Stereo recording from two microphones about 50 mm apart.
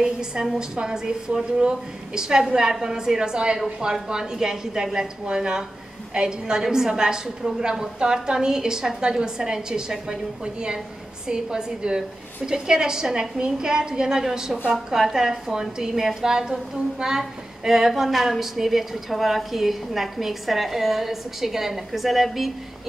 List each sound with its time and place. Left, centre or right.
0.0 s a woman's voice: centre